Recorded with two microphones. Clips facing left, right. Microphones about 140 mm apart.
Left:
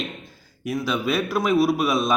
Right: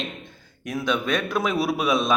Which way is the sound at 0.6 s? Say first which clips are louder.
Left 1 dB; 5° left (ahead or behind).